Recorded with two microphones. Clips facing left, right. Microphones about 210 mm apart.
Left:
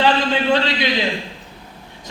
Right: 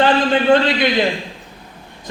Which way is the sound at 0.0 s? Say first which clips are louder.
Right 3 dB; 50° right (ahead or behind).